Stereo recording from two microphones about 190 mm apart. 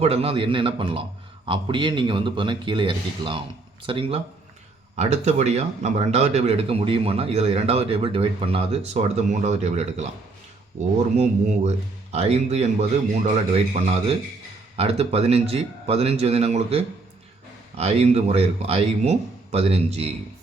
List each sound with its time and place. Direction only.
0.0 s a man's voice: 30° right (ahead or behind)